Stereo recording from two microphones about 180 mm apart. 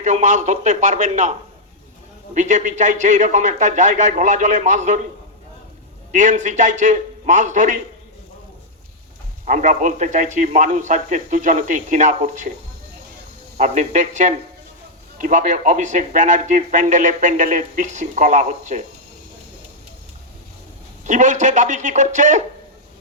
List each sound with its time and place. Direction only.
0.0 s speech: 40° right (ahead or behind)
6.1 s speech: 45° right (ahead or behind)
9.5 s speech: 45° right (ahead or behind)
13.6 s speech: 45° right (ahead or behind)
21.0 s speech: 45° right (ahead or behind)